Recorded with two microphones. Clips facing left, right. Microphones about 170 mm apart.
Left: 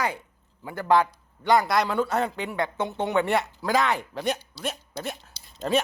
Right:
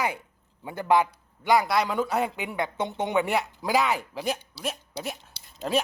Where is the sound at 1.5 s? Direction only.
5° right (ahead or behind).